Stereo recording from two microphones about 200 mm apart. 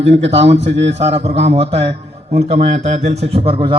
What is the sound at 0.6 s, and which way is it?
Speech, 60° right (ahead or behind).